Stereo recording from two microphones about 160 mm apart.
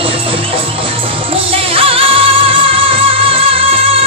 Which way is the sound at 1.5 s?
35° right (ahead or behind).